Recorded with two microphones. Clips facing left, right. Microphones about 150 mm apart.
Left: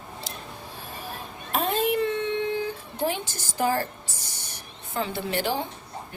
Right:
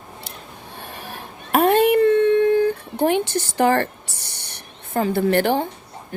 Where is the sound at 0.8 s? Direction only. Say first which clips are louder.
Right 3 dB; 70° right (ahead or behind).